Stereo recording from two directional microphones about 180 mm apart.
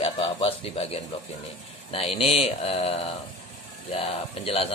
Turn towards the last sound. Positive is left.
turn(degrees=30)  # may be behind; listen again after turning